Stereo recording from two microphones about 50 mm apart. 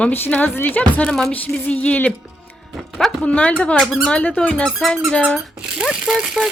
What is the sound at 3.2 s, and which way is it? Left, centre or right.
Speech, left.